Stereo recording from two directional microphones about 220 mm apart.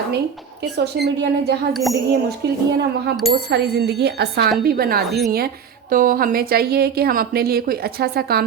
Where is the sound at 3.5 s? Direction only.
50° right (ahead or behind).